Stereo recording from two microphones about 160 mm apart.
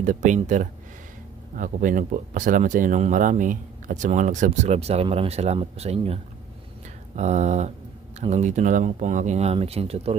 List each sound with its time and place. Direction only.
0.0 s speech: 50° right (ahead or behind)
7.2 s speech: 45° right (ahead or behind)